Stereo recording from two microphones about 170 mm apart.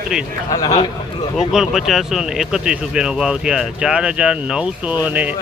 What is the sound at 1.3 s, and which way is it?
Speech, centre (ahead or behind).